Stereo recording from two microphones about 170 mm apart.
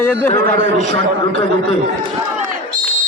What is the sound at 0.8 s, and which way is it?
Speech, 35° left (ahead or behind).